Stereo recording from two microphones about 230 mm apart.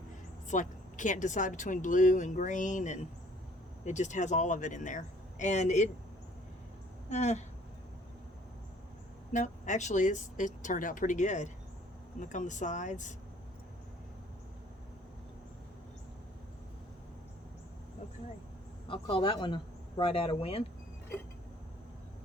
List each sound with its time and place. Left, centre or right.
0.5 s speech: left
7.1 s a man's voice: left
9.3 s speech: left
18.9 s a man's voice: left